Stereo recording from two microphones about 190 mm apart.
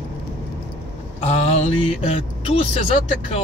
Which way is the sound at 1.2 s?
35° left (ahead or behind).